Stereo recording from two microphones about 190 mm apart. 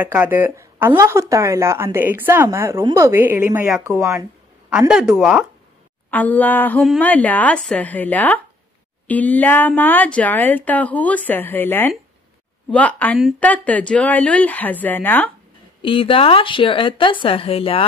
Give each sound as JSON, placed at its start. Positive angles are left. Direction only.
{"t": 0.0, "sound": "speech", "side_deg": -10}
{"t": 6.0, "sound": "speech", "side_deg": 10}
{"t": 15.8, "sound": "a woman's voice", "side_deg": 25}